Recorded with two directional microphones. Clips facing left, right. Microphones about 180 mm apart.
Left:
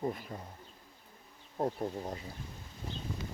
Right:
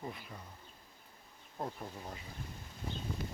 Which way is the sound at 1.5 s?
35° left (ahead or behind).